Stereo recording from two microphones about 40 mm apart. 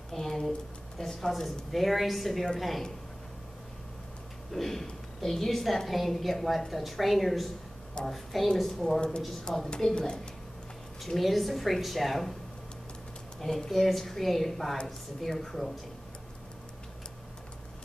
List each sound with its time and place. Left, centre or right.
0.1 s a sound: centre
0.9 s a woman's voice: centre
4.5 s a woman's voice: centre
9.9 s speech: centre
11.1 s a woman's voice: centre
13.4 s a woman's voice: centre